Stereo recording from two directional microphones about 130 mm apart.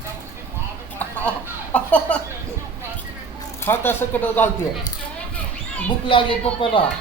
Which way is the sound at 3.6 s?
15° left (ahead or behind).